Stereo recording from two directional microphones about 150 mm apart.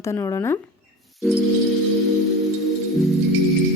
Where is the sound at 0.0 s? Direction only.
20° left (ahead or behind).